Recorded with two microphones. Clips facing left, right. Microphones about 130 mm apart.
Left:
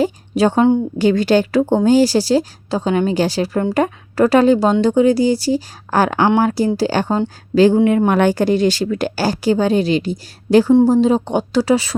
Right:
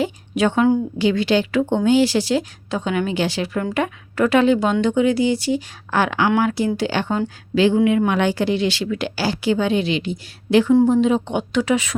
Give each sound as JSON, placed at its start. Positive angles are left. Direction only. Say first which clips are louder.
{"t": 0.0, "sound": "a woman's voice", "louder": "left 4 dB", "side_deg": 35}